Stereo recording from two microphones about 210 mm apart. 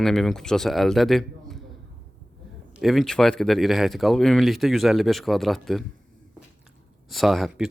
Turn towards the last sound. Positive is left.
turn(degrees=0)  # may be behind; listen again after turning